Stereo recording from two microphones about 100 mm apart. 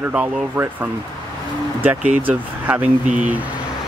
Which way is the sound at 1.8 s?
20° right (ahead or behind).